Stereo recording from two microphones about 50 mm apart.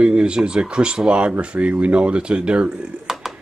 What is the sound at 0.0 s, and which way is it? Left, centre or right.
Speech, centre.